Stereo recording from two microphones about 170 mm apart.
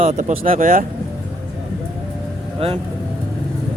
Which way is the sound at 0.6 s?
55° right (ahead or behind).